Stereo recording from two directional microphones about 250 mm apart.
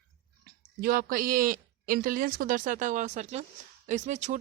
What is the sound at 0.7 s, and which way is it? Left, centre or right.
Speech, right.